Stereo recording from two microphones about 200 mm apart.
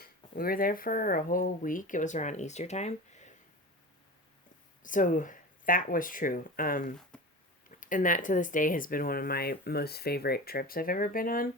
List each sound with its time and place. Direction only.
0.0 s speech: 45° left (ahead or behind)
4.8 s speech: 40° left (ahead or behind)
7.1 s a sound: 5° left (ahead or behind)
7.7 s speech: 40° left (ahead or behind)